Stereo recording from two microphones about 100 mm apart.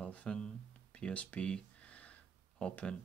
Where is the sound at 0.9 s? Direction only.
10° left (ahead or behind).